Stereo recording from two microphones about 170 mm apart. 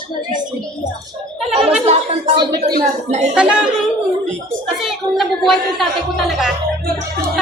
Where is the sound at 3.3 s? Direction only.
5° right (ahead or behind).